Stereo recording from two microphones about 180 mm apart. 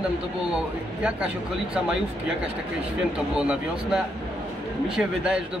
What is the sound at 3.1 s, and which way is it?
Speech, 5° right (ahead or behind).